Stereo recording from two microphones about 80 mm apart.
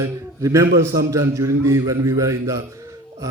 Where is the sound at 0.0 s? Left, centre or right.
Right.